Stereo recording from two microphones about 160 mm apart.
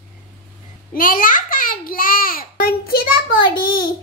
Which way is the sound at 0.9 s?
60° left (ahead or behind).